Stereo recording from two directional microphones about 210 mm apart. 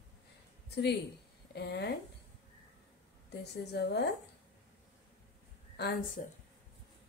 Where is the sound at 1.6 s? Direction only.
50° left (ahead or behind).